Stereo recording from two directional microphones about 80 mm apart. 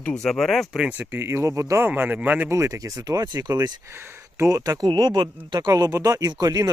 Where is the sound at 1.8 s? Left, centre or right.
Right.